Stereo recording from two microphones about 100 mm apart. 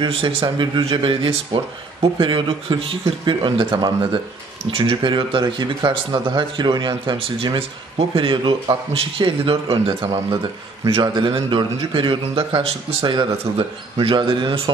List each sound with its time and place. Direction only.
0.0 s a man's voice: 65° right (ahead or behind)
10.9 s speech: 55° right (ahead or behind)